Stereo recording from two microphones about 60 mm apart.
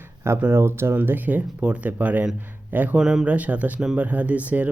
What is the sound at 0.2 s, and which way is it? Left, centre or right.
Speech, right.